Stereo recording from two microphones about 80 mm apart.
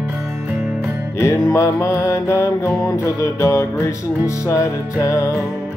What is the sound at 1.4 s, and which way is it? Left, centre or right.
Music, left.